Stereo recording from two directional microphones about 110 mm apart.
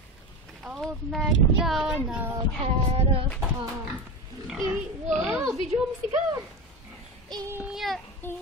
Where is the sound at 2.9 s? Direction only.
65° right (ahead or behind).